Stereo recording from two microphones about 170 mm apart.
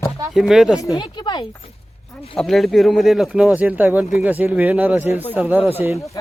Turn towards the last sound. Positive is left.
turn(degrees=-10)  # may be behind; listen again after turning